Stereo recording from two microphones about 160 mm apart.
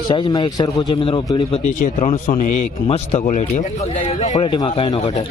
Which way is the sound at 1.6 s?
50° left (ahead or behind).